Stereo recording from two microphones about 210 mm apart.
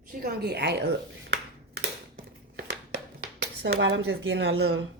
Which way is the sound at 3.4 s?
55° right (ahead or behind).